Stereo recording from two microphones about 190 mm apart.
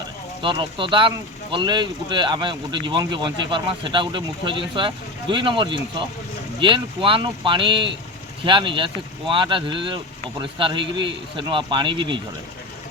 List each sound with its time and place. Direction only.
0.4 s speech: 25° right (ahead or behind)